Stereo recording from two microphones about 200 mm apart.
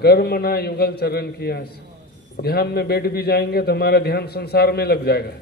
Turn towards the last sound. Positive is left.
turn(degrees=50)  # may be behind; listen again after turning